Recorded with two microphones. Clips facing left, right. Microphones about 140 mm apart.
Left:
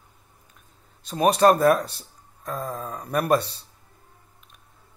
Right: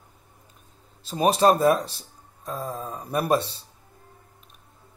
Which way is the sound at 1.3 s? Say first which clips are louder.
Left 1 dB; 25° right (ahead or behind).